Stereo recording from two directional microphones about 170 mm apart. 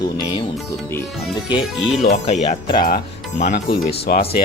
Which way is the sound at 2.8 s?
55° left (ahead or behind).